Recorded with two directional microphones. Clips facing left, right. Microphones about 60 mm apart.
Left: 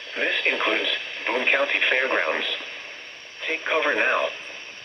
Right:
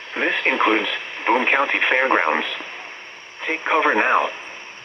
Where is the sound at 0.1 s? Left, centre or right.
Right.